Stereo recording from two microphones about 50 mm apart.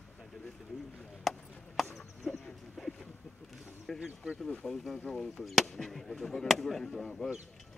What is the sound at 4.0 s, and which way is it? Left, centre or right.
Speech, centre.